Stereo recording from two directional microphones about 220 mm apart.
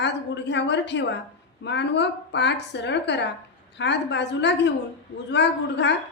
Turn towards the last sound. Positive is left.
turn(degrees=50)  # may be behind; listen again after turning